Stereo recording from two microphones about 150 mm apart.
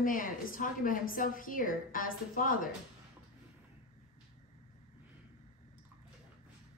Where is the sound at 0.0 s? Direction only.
65° left (ahead or behind).